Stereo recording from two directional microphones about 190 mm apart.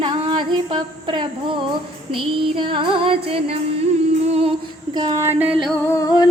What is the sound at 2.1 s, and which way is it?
Music, 25° right (ahead or behind).